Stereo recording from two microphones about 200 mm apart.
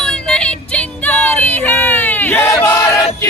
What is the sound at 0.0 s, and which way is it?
Music, 5° left (ahead or behind).